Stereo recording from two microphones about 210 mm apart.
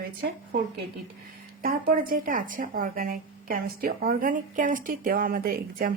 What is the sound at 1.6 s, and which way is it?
Speech, 45° right (ahead or behind).